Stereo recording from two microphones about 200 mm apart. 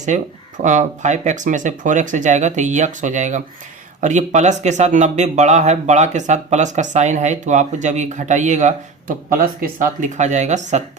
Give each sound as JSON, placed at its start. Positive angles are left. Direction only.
{"t": 0.0, "sound": "speech", "side_deg": -35}